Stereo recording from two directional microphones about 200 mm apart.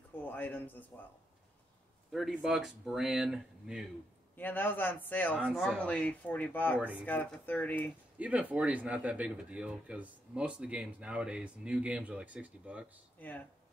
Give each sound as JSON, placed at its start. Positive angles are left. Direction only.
{"t": 0.2, "sound": "speech", "side_deg": 10}
{"t": 2.1, "sound": "speech", "side_deg": 0}
{"t": 4.4, "sound": "speech", "side_deg": 10}
{"t": 8.2, "sound": "speech", "side_deg": -5}
{"t": 13.2, "sound": "speech", "side_deg": 10}